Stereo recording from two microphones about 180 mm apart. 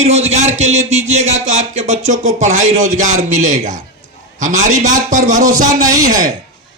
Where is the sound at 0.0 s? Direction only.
40° right (ahead or behind).